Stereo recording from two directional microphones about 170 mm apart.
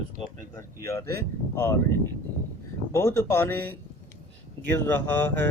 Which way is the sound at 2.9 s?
15° left (ahead or behind).